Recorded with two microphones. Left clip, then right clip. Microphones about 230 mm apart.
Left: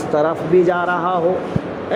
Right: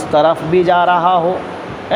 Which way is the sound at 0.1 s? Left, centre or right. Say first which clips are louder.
Right 4 dB; right.